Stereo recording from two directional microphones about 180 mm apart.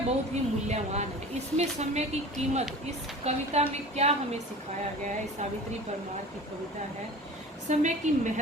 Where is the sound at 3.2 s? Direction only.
35° right (ahead or behind).